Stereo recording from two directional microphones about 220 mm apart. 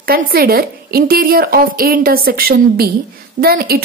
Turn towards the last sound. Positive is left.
turn(degrees=-45)  # may be behind; listen again after turning